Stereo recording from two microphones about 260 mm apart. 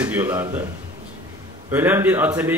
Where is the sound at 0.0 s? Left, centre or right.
Centre.